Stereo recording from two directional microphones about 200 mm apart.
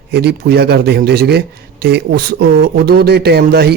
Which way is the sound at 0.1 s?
55° right (ahead or behind).